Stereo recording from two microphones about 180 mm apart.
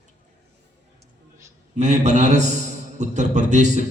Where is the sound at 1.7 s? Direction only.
40° right (ahead or behind).